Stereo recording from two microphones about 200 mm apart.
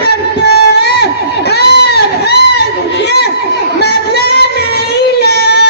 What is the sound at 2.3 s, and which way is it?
Crowd, 55° left (ahead or behind).